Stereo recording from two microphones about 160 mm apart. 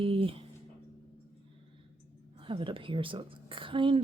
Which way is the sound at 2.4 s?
35° right (ahead or behind).